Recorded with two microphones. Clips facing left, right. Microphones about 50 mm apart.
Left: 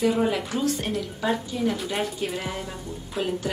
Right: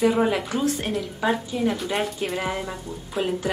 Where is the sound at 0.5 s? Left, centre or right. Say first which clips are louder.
Right 1 dB; centre.